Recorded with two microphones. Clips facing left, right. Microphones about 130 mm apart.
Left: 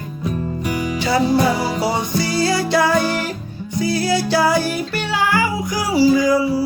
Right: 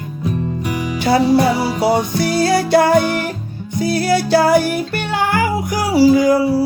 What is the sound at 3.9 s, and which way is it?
Music, 60° right (ahead or behind).